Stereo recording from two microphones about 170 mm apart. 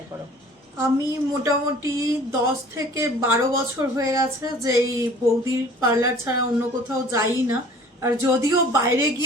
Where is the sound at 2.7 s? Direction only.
15° right (ahead or behind).